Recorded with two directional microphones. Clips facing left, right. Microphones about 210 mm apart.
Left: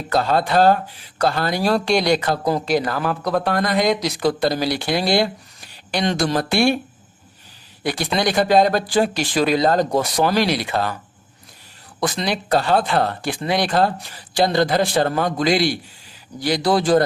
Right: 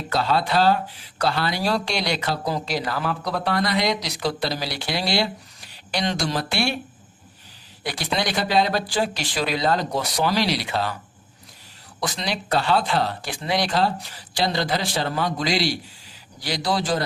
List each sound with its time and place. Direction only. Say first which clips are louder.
0.1 s speech: left 4 dB; 50° left (ahead or behind)
7.9 s speech: left 5 dB; 50° left (ahead or behind)
11.9 s speech: left 5 dB; 55° left (ahead or behind)